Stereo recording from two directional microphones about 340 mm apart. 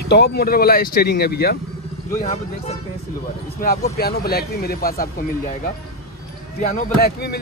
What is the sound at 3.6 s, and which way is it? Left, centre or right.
Speech, left.